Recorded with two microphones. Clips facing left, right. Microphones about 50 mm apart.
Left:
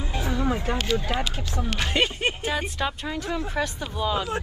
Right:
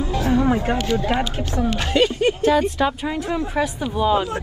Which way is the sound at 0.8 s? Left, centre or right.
Right.